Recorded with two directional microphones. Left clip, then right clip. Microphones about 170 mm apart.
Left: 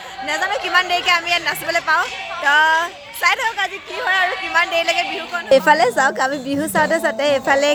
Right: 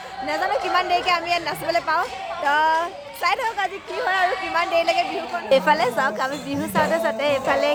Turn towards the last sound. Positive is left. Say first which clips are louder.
# left 4 dB
turn(degrees=45)  # may be behind; listen again after turning